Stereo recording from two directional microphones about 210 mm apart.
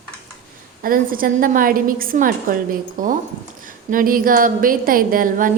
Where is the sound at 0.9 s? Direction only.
45° right (ahead or behind).